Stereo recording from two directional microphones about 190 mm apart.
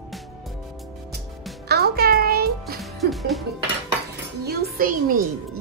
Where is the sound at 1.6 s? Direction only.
55° right (ahead or behind).